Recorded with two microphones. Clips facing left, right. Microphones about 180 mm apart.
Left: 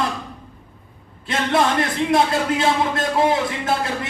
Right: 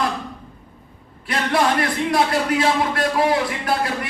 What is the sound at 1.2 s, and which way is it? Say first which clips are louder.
A man's voice: even; 25° left (ahead or behind).